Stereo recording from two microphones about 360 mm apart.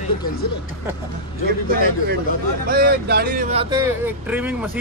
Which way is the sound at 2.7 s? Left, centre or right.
Right.